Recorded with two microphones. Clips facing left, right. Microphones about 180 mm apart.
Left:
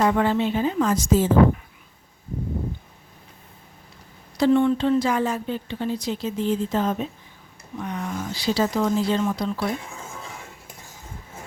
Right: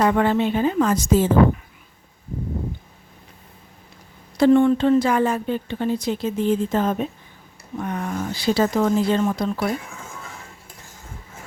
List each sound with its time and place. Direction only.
0.0 s a woman's voice: 55° right (ahead or behind)
4.4 s speech: 50° right (ahead or behind)